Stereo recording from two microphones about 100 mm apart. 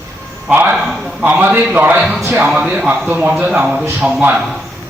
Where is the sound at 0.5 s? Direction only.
10° right (ahead or behind).